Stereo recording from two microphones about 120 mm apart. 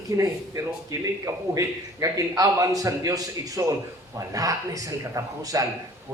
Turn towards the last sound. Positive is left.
turn(degrees=-30)  # may be behind; listen again after turning